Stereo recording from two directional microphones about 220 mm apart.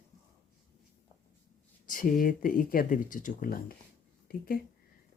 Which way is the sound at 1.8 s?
40° left (ahead or behind).